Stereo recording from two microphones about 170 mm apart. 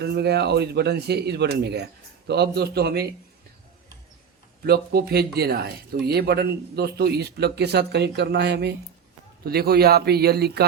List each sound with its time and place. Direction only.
0.0 s speech: 75° right (ahead or behind)
4.6 s speech: 65° right (ahead or behind)
9.4 s speech: 65° right (ahead or behind)